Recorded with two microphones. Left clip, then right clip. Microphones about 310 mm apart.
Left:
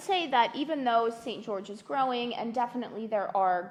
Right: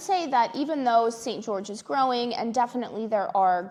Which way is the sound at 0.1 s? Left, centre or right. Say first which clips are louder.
Right 3 dB; centre.